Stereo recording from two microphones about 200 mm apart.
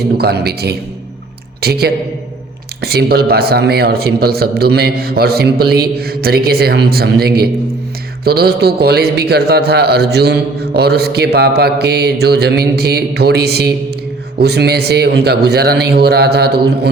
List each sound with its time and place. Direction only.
0.2 s a man's voice: 55° right (ahead or behind)